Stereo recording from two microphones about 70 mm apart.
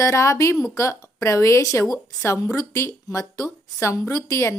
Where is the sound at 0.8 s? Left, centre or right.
Left.